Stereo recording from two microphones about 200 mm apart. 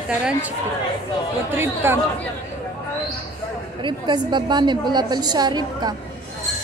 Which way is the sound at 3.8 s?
20° right (ahead or behind).